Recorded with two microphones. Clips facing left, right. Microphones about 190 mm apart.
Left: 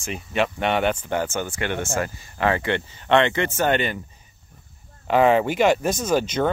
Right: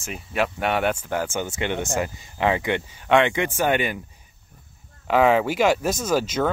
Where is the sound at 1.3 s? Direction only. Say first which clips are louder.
Even; 15° right (ahead or behind).